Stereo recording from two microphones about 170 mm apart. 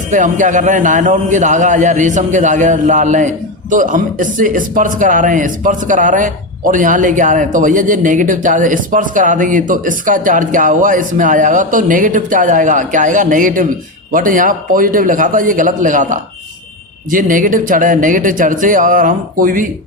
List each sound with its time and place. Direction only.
0.1 s a man's voice: 50° right (ahead or behind)